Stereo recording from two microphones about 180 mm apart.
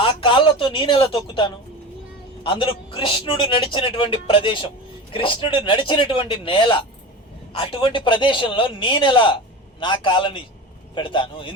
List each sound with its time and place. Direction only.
0.0 s a man's voice: 30° left (ahead or behind)